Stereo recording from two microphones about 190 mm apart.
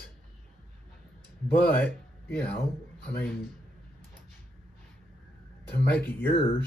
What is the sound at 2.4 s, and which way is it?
Speech, 10° left (ahead or behind).